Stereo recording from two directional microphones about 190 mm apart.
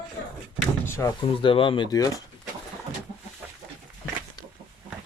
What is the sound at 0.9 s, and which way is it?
Speech, 15° left (ahead or behind).